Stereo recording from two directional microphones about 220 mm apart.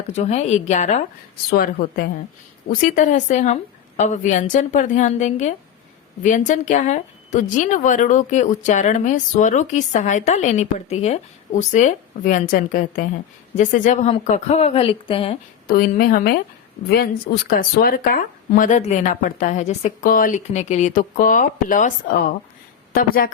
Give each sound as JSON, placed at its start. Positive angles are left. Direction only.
{"t": 0.2, "sound": "a woman's voice", "side_deg": 30}
{"t": 15.7, "sound": "a woman's voice", "side_deg": 40}
{"t": 17.6, "sound": "a woman's voice", "side_deg": 40}